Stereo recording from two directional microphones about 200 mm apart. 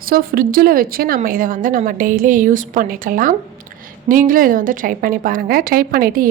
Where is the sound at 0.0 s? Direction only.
45° right (ahead or behind).